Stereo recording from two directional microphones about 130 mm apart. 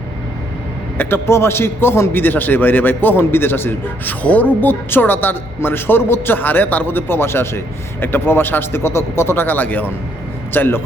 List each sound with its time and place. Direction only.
0.9 s a man's voice: 20° left (ahead or behind)